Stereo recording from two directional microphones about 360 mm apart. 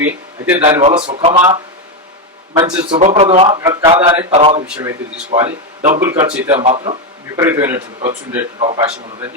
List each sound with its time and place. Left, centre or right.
0.0 s a man's voice: centre
0.8 s a man's voice: centre
4.6 s speech: centre
5.5 s speech: centre
6.0 s a man's voice: centre